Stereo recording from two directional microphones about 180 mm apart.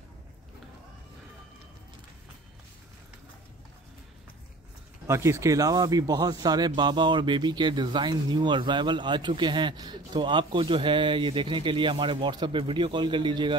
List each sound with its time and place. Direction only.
5.0 s speech: 15° right (ahead or behind)